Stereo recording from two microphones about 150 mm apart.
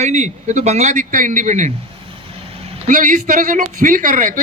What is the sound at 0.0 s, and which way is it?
A man's voice, 50° right (ahead or behind).